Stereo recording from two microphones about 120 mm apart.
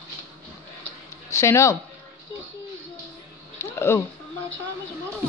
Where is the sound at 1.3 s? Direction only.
25° left (ahead or behind).